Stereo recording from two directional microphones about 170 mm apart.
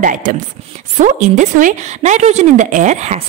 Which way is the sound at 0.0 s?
50° right (ahead or behind).